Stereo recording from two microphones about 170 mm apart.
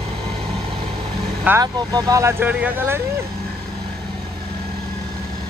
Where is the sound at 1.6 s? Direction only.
20° right (ahead or behind).